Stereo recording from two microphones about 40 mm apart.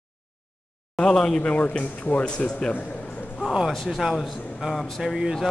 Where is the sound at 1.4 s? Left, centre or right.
Left.